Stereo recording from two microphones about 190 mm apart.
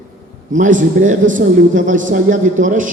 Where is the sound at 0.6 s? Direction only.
45° right (ahead or behind).